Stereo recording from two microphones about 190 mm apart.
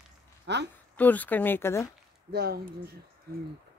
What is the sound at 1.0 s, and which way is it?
Speech, 10° left (ahead or behind).